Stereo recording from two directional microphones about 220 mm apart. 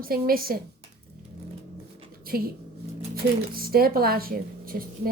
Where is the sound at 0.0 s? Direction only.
40° right (ahead or behind).